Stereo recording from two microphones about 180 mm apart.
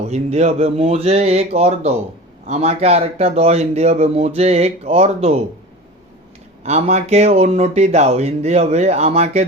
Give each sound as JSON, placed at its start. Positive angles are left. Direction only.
{"t": 0.1, "sound": "speech", "side_deg": -40}
{"t": 6.6, "sound": "speech", "side_deg": -35}